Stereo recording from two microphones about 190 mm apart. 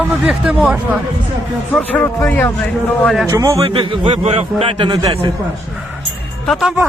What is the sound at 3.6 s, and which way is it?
A man's voice, 25° right (ahead or behind).